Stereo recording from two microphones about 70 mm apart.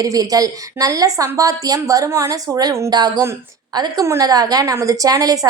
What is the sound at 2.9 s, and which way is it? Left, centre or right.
Speech, right.